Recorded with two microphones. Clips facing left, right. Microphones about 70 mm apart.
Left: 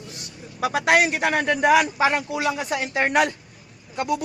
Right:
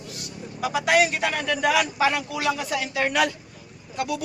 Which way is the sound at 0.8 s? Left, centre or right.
Left.